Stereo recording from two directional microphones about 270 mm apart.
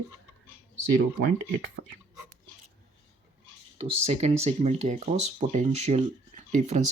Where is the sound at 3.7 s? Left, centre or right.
Right.